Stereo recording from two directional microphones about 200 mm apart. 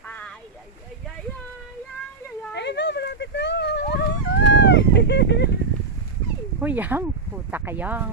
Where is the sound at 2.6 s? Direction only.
60° left (ahead or behind).